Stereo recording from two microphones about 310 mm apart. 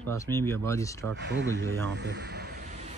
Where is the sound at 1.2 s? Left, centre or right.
Right.